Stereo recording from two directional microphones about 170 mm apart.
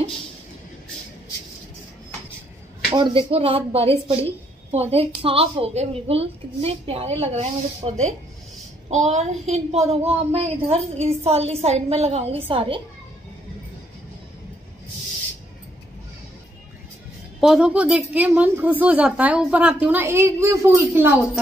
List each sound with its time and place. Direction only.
2.9 s speech: 30° right (ahead or behind)
17.4 s a woman's voice: 5° right (ahead or behind)